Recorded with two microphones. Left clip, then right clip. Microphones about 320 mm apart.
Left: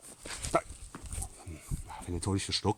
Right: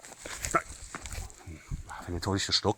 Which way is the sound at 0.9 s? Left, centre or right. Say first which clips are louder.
Right 8 dB; right.